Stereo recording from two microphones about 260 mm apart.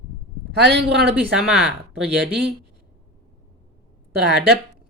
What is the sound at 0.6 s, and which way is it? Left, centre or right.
Speech, right.